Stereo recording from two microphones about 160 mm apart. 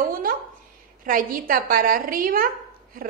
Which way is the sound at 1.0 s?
60° right (ahead or behind).